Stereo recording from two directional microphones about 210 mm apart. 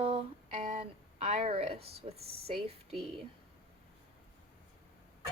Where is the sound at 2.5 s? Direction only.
30° right (ahead or behind).